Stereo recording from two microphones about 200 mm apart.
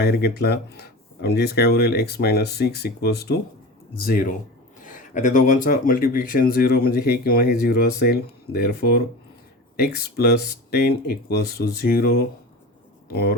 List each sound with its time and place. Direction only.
0.0 s speech: 55° left (ahead or behind)
4.8 s a sound: 40° left (ahead or behind)
5.6 s speech: 45° left (ahead or behind)